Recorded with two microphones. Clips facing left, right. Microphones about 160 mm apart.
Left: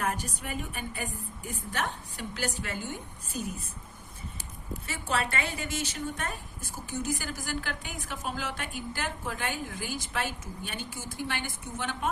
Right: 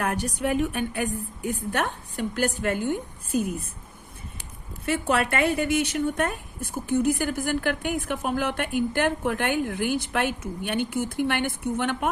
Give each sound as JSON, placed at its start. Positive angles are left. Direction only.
{"t": 0.0, "sound": "speech", "side_deg": -70}
{"t": 4.9, "sound": "speech", "side_deg": -60}